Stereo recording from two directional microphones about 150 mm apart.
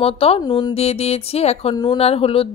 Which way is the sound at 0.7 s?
40° left (ahead or behind).